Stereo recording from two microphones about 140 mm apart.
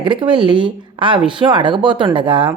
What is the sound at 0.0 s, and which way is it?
A woman's voice, 35° right (ahead or behind).